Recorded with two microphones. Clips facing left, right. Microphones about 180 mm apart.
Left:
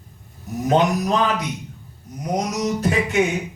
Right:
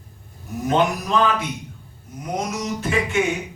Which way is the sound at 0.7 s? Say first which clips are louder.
Left 2 dB; 40° left (ahead or behind).